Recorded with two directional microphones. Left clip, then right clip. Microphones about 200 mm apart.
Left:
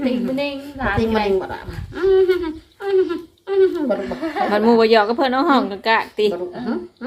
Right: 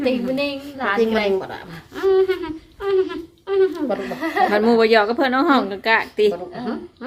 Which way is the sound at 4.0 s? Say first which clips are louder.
Right 1 dB; 60° right (ahead or behind).